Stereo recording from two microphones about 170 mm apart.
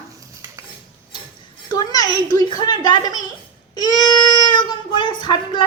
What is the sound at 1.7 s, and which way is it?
A child's voice, 25° left (ahead or behind).